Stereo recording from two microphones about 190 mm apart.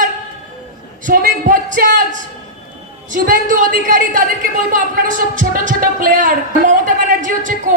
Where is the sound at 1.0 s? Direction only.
45° right (ahead or behind).